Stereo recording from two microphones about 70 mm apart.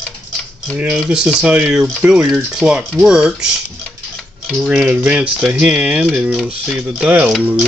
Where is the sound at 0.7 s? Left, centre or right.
Centre.